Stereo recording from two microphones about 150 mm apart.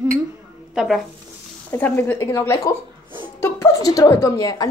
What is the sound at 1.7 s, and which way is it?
A woman's voice, 15° left (ahead or behind).